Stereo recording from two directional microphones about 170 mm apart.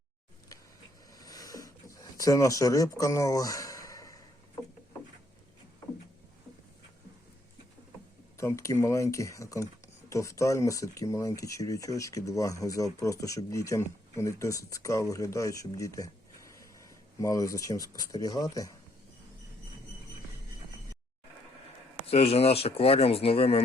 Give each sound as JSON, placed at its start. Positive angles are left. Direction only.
{"t": 1.2, "sound": "a sound", "side_deg": 20}
{"t": 8.4, "sound": "speech", "side_deg": 15}
{"t": 22.0, "sound": "speech", "side_deg": 35}